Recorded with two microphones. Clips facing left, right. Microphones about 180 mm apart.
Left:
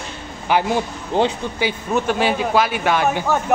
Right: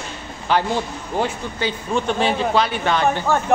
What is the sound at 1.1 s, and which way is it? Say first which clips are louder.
Speech: left 4 dB; 25° left (ahead or behind).